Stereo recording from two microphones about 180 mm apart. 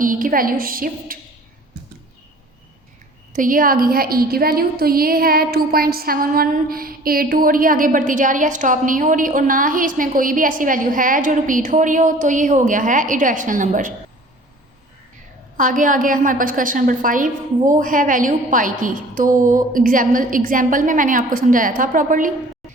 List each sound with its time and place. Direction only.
0.0 s a woman's voice: 50° right (ahead or behind)
3.3 s a woman's voice: 50° right (ahead or behind)
15.5 s a woman's voice: 45° right (ahead or behind)